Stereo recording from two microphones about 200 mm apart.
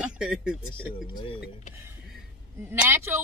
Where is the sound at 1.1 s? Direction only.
25° left (ahead or behind).